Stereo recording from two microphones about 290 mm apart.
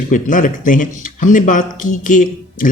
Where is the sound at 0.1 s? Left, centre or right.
Left.